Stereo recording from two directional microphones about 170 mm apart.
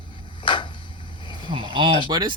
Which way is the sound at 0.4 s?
30° left (ahead or behind).